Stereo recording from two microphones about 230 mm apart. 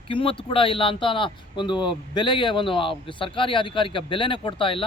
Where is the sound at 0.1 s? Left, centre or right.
Left.